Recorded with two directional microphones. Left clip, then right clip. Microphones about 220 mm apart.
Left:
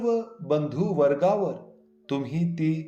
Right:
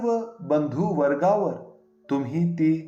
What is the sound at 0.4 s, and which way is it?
Speech, 50° left (ahead or behind).